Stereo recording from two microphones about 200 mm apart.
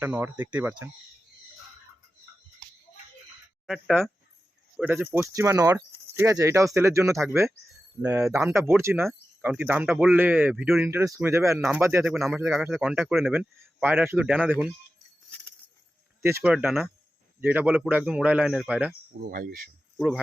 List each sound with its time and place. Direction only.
0.0 s speech: 10° right (ahead or behind)
3.7 s a man's voice: centre (ahead or behind)
16.2 s a man's voice: 10° right (ahead or behind)
19.3 s speech: 45° right (ahead or behind)
20.0 s a man's voice: 5° right (ahead or behind)